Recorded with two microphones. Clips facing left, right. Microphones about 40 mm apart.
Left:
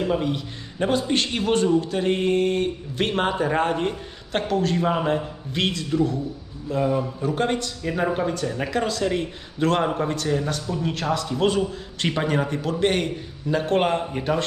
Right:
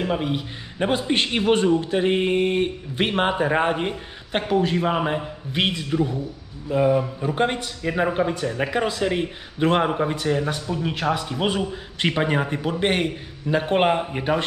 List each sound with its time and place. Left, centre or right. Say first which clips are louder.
0.0 s speech: even; centre